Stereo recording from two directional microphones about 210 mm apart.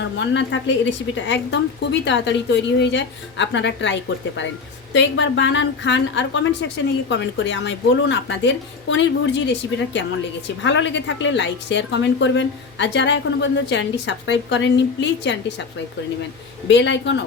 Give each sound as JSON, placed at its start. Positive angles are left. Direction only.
{"t": 0.0, "sound": "a woman's voice", "side_deg": 60}
{"t": 16.6, "sound": "a woman's voice", "side_deg": 60}